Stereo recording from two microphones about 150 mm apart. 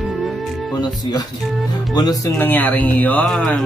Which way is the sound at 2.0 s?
25° left (ahead or behind).